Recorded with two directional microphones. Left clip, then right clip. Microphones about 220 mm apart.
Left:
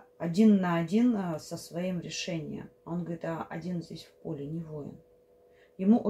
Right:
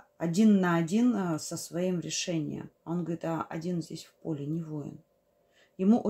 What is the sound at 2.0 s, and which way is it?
Speech, 45° right (ahead or behind).